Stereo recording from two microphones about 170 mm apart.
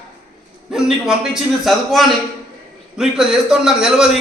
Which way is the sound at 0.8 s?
Centre (ahead or behind).